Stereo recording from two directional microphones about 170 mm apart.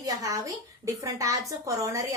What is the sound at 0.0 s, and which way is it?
Speech, 20° right (ahead or behind).